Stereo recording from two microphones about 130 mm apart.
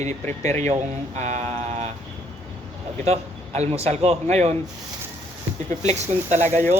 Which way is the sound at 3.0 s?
55° right (ahead or behind).